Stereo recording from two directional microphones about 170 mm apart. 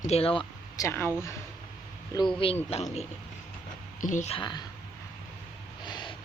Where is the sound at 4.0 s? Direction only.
45° left (ahead or behind).